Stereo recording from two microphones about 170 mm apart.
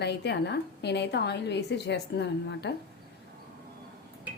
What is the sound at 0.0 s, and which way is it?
A woman's voice, 80° left.